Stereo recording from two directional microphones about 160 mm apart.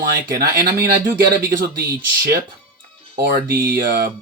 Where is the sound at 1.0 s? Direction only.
15° right (ahead or behind).